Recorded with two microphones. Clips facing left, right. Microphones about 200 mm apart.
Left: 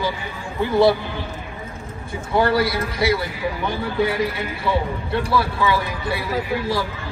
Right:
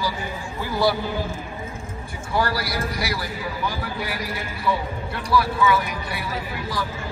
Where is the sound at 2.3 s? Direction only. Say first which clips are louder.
Left 6 dB; 25° left (ahead or behind).